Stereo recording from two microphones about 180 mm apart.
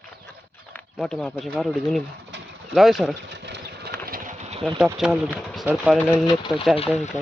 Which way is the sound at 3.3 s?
70° right (ahead or behind).